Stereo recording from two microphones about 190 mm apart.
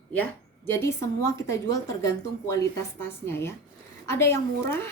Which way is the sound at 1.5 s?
15° left (ahead or behind).